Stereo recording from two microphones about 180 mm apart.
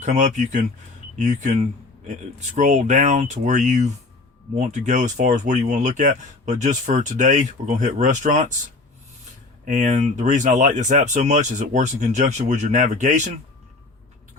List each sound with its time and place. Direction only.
0.0 s speech: 40° right (ahead or behind)
9.6 s speech: 45° right (ahead or behind)